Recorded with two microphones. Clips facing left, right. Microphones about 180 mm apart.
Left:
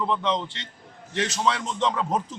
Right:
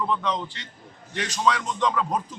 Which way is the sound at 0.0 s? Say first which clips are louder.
Left 1 dB; 20° left (ahead or behind).